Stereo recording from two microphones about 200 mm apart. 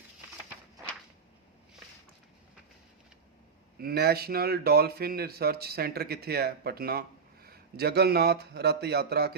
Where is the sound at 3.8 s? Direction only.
50° right (ahead or behind).